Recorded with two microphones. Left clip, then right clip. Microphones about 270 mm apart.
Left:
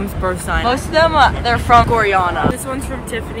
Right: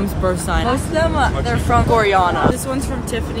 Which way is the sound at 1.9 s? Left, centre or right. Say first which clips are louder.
Even; centre.